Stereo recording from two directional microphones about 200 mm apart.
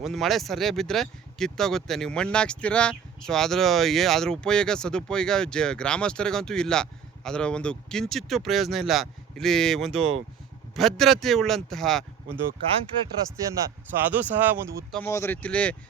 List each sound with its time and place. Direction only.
0.0 s speech: centre (ahead or behind)
10.0 s speech: 70° right (ahead or behind)
10.8 s speech: centre (ahead or behind)
14.1 s speech: 10° right (ahead or behind)
14.9 s speech: 10° left (ahead or behind)